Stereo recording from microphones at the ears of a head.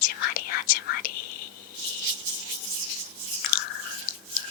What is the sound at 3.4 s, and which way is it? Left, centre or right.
Chewing, left.